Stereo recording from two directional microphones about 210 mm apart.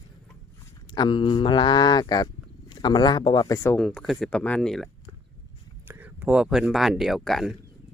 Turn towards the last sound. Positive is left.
turn(degrees=0)  # may be behind; listen again after turning